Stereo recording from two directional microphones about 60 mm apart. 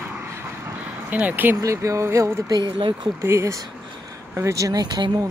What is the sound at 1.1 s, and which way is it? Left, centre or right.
Speech, right.